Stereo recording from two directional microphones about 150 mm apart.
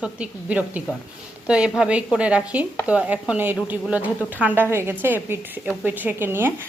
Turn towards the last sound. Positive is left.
turn(degrees=-15)  # may be behind; listen again after turning